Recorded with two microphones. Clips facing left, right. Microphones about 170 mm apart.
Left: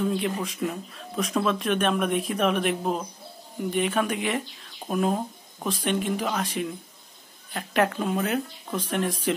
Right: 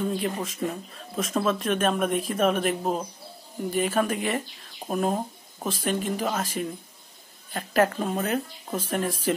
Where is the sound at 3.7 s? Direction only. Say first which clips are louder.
Right 1 dB; 5° right (ahead or behind).